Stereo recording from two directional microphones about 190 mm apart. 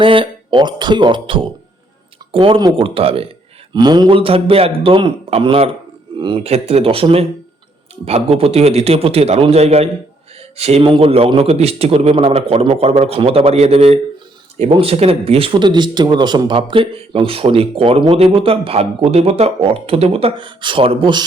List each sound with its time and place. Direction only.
0.0 s a man's voice: 25° right (ahead or behind)